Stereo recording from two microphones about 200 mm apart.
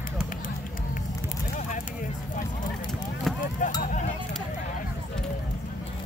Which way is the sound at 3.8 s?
40° left (ahead or behind).